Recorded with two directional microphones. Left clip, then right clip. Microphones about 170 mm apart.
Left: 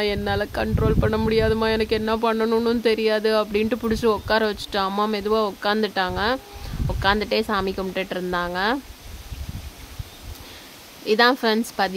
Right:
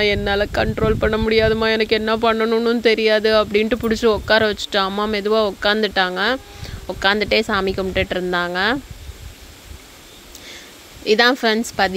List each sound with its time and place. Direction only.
0.0 s speech: 15° right (ahead or behind)
11.1 s speech: 15° right (ahead or behind)